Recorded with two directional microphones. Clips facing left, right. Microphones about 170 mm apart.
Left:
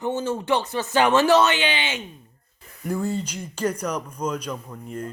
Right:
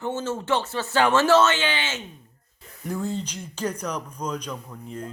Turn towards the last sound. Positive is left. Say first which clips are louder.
# left 3 dB
turn(degrees=5)  # may be behind; listen again after turning